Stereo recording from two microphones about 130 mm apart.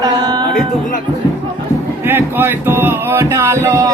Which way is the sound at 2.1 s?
15° right (ahead or behind).